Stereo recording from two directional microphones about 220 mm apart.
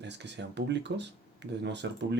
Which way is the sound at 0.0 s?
50° right (ahead or behind).